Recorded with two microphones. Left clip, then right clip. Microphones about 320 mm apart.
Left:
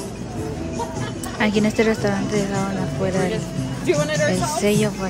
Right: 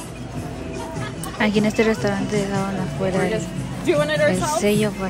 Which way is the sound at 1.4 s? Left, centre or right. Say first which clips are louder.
Even; centre.